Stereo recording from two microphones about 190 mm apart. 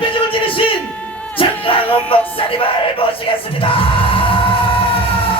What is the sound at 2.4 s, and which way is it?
Music, 30° left (ahead or behind).